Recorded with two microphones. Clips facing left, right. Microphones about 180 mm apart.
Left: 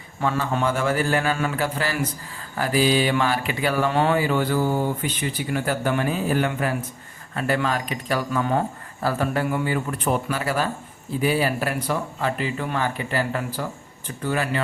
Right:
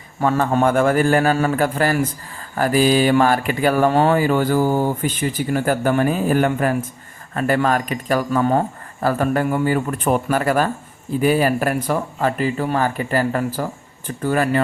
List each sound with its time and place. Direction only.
0.2 s speech: 50° right (ahead or behind)